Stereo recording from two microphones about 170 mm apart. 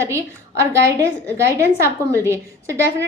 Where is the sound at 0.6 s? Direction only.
15° right (ahead or behind).